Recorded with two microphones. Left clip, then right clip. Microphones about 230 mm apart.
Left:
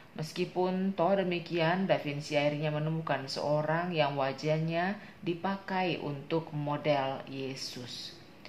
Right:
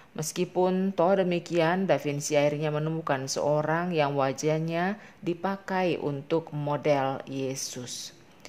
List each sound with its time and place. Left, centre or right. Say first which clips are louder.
0.2 s speech: right 6 dB; right